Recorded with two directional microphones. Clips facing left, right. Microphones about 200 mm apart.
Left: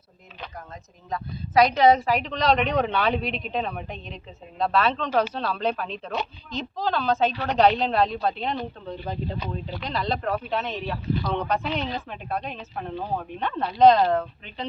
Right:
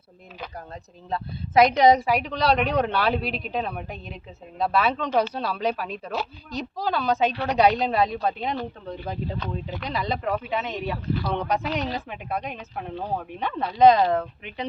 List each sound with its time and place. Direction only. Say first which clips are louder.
1.1 s speech: right 1 dB; 25° right (ahead or behind); by 8.5 s 10° right (ahead or behind)
9.8 s speech: left 1 dB; 10° right (ahead or behind)